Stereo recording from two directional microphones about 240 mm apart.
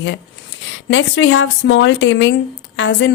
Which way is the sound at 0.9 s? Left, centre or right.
Left.